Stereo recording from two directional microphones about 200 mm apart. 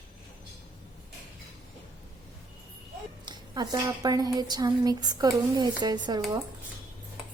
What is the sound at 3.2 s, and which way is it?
Speech, 20° right (ahead or behind).